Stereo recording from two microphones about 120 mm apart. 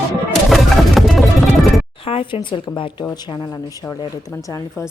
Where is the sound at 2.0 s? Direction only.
50° left (ahead or behind).